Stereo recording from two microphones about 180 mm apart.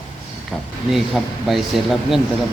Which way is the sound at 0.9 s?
Centre (ahead or behind).